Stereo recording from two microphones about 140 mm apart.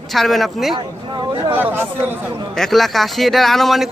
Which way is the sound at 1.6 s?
15° right (ahead or behind).